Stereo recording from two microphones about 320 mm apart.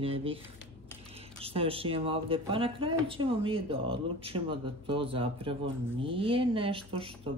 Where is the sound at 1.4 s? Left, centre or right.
Centre.